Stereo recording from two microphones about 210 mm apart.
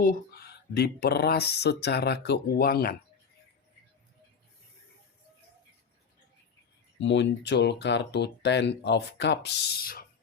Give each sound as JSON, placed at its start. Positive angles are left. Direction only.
{"t": 0.0, "sound": "speech", "side_deg": 45}
{"t": 7.0, "sound": "speech", "side_deg": 60}